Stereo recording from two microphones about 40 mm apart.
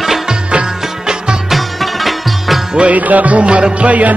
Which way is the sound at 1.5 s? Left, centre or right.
Centre.